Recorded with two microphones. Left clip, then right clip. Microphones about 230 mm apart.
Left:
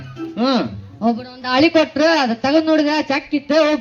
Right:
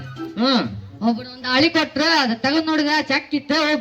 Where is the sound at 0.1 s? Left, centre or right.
Right.